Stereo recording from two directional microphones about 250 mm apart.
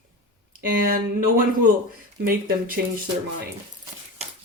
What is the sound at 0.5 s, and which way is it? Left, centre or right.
Speech, right.